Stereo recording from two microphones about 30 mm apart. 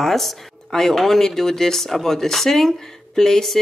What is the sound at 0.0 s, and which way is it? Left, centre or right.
Speech, centre.